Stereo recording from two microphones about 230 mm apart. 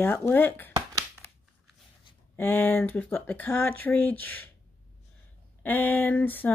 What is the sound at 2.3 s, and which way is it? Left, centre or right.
Speech, centre.